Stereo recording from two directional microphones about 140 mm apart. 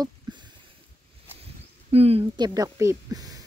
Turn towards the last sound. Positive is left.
turn(degrees=-25)  # may be behind; listen again after turning